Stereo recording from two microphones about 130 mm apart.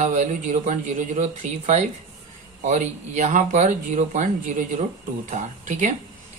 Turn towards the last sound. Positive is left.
turn(degrees=-70)  # may be behind; listen again after turning